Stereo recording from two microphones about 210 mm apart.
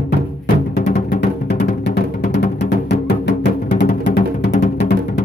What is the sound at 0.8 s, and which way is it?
Music, 40° left (ahead or behind).